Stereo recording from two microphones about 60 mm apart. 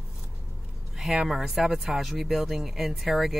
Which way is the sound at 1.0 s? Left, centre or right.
Centre.